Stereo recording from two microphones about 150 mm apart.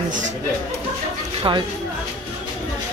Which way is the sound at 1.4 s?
30° right (ahead or behind).